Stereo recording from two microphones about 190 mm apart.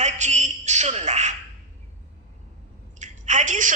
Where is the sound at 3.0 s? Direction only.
40° right (ahead or behind).